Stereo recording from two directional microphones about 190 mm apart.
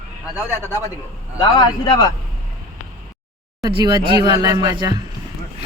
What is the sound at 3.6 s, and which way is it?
A man's voice, 20° right (ahead or behind).